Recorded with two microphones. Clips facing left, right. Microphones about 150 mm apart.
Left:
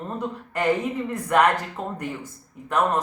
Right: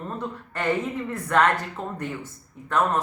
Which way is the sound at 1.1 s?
15° left (ahead or behind).